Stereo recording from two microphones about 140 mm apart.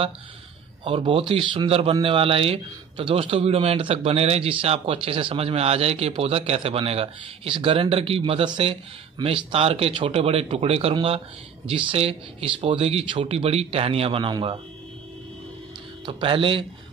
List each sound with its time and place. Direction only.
0.8 s a man's voice: 40° right (ahead or behind)
16.1 s speech: 40° right (ahead or behind)